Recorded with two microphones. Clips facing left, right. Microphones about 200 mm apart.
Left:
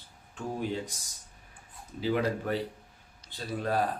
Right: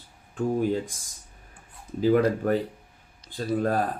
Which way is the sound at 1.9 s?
45° right (ahead or behind).